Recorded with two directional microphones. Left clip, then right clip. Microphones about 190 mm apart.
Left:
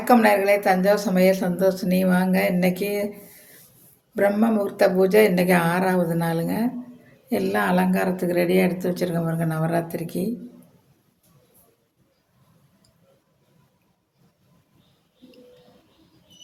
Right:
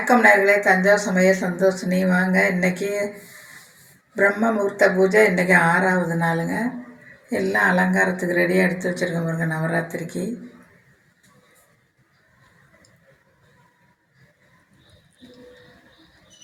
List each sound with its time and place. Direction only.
0.0 s speech: 30° left (ahead or behind)
4.1 s speech: 30° left (ahead or behind)